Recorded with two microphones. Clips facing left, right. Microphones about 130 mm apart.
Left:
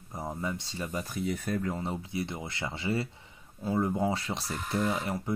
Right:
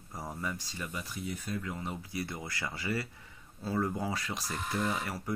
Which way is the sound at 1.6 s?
35° left (ahead or behind).